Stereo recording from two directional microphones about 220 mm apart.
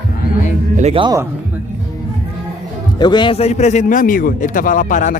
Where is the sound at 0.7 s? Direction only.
25° right (ahead or behind).